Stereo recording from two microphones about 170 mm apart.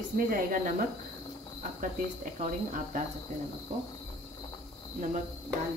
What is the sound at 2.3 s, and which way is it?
Speech, 45° right (ahead or behind).